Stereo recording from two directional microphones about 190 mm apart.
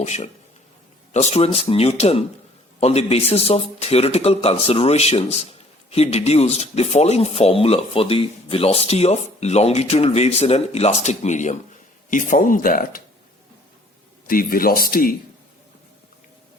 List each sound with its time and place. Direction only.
0.0 s a man's voice: 35° left (ahead or behind)
14.3 s speech: 50° left (ahead or behind)